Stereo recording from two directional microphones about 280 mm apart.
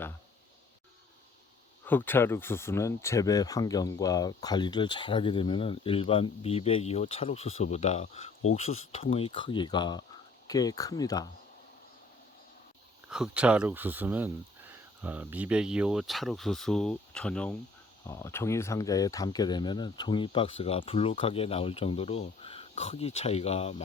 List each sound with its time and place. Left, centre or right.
1.8 s speech: centre
13.1 s speech: centre; by 23.8 s left